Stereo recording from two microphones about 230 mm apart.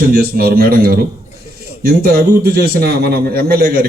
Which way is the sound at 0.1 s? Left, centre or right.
Right.